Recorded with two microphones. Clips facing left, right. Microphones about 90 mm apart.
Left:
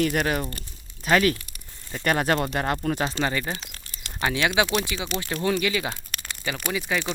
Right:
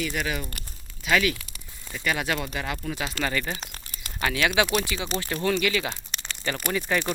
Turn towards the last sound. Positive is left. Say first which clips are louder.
# right 1 dB
turn(degrees=5)  # may be behind; listen again after turning